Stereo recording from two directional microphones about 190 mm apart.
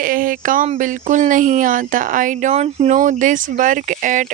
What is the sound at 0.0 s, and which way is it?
A woman's voice, 45° right (ahead or behind).